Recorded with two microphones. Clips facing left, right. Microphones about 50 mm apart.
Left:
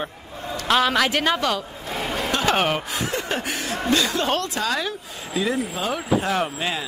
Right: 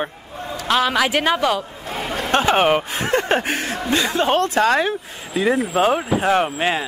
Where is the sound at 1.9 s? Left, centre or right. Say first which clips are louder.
Right 4 dB; right.